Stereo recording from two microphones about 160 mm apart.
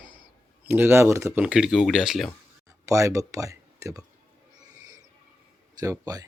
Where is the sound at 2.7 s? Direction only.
20° right (ahead or behind).